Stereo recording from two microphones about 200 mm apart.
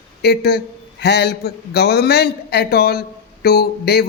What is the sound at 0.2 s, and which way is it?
A man's voice, 55° left (ahead or behind).